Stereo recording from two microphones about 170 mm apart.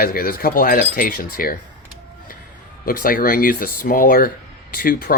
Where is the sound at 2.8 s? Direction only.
60° left (ahead or behind).